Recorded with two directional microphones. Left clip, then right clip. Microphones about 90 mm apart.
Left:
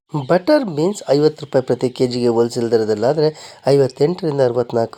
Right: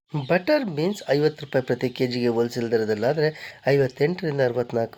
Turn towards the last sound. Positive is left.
turn(degrees=35)  # may be behind; listen again after turning